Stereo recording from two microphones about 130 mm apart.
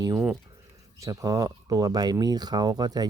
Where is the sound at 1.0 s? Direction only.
25° right (ahead or behind).